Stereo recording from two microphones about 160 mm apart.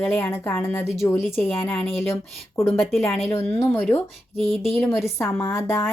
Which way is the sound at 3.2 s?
15° left (ahead or behind).